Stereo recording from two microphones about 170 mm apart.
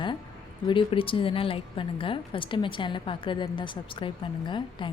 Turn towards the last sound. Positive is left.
turn(degrees=30)  # may be behind; listen again after turning